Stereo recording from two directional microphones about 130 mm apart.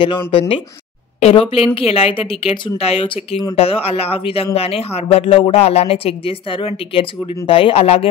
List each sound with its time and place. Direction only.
0.3 s speech: 45° left (ahead or behind)